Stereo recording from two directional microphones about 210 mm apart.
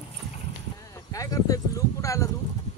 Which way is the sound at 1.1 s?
15° left (ahead or behind).